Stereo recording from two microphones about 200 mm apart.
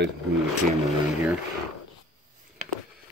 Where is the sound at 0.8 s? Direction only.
5° right (ahead or behind).